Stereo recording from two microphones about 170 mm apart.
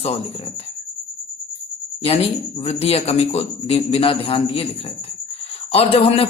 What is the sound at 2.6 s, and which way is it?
A man's voice, 40° left (ahead or behind).